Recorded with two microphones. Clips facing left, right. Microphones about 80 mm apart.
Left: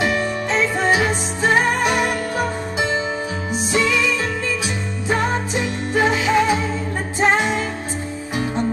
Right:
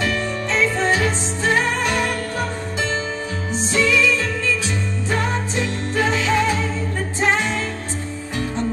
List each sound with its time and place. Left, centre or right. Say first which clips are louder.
0.0 s music: left 2 dB; centre
5.1 s music: left 3 dB; centre